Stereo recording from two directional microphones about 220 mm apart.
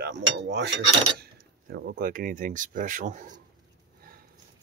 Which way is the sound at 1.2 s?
45° right (ahead or behind).